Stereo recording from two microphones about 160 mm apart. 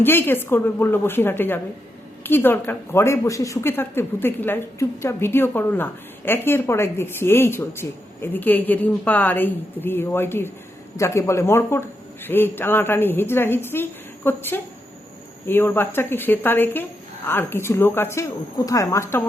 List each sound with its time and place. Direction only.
0.0 s a woman's voice: 15° left (ahead or behind)